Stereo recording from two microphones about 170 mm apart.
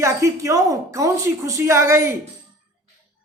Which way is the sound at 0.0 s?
20° right (ahead or behind).